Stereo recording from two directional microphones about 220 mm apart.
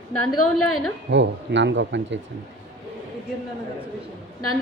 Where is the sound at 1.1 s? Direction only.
55° right (ahead or behind).